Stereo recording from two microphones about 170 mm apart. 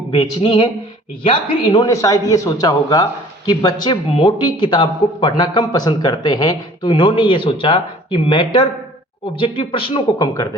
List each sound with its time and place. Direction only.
0.2 s a man's voice: 30° left (ahead or behind)
1.9 s a man's voice: 20° left (ahead or behind)